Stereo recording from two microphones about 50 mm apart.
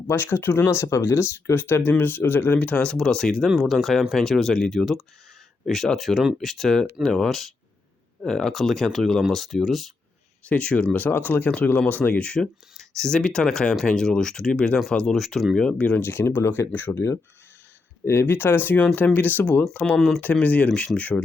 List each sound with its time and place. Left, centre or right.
0.1 s speech: left
1.5 s speech: left
2.6 s speech: left
3.4 s speech: centre
10.5 s speech: left
12.2 s speech: centre
12.7 s speech: centre
16.0 s speech: left
18.0 s speech: left
20.0 s speech: centre
20.3 s speech: left